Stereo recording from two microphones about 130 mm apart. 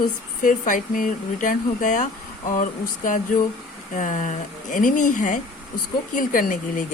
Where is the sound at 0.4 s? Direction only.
90° left.